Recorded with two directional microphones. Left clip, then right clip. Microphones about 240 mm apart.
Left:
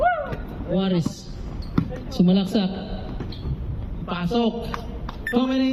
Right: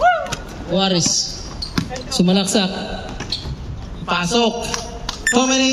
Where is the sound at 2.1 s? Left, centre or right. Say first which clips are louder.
Right 6 dB; right.